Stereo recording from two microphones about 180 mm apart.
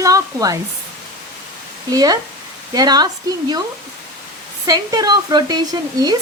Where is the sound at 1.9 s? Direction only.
20° right (ahead or behind).